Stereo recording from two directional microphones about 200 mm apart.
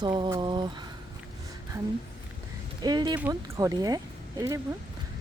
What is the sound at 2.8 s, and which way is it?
Speech, 20° right (ahead or behind).